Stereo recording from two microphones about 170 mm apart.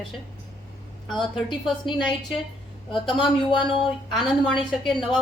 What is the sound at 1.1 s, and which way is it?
A woman's voice, centre (ahead or behind).